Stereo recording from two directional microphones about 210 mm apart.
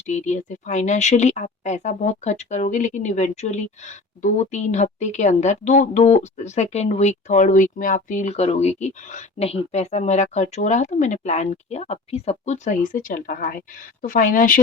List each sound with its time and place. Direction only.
0.1 s speech: 35° left (ahead or behind)